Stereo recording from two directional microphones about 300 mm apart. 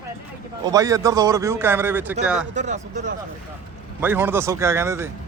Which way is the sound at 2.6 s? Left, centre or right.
Right.